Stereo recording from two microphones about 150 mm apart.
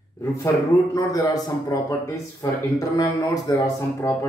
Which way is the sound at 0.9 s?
25° left (ahead or behind).